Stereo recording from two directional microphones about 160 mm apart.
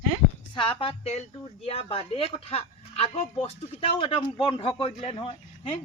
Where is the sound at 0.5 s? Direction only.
30° left (ahead or behind).